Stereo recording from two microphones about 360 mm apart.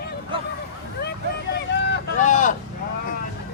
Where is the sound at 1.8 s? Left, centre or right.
Left.